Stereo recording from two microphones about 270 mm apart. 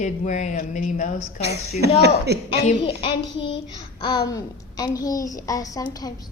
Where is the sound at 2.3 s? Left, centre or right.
Right.